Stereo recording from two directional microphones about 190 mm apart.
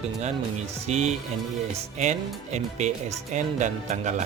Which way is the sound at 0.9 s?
35° right (ahead or behind).